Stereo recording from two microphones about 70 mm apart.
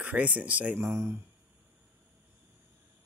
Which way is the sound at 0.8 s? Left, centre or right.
Right.